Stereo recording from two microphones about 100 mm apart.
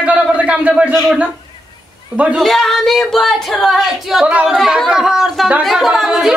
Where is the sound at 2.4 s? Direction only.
5° left (ahead or behind).